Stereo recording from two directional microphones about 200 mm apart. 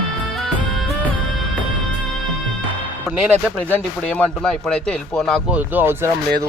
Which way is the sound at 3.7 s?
5° left (ahead or behind).